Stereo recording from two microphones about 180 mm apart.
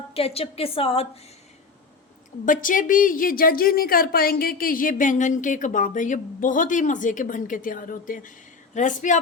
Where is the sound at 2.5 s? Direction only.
50° left (ahead or behind).